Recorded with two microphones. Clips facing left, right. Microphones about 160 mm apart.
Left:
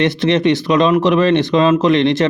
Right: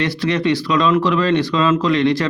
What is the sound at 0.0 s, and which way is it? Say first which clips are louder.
Speech: left 5 dB; 20° left (ahead or behind).